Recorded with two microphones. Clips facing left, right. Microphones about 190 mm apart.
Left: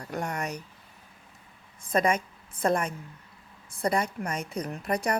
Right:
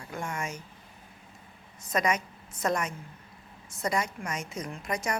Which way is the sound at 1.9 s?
30° left (ahead or behind).